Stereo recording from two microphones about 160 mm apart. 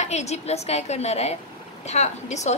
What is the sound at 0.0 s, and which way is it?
A woman's voice, 45° left (ahead or behind).